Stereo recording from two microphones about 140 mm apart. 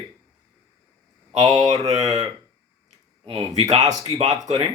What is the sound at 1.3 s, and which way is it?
Speech, 25° right (ahead or behind).